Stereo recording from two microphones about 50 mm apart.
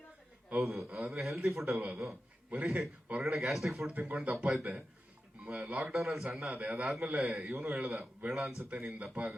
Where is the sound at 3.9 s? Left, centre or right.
Right.